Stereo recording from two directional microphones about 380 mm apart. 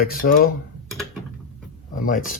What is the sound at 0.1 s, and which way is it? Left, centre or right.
Speech, left.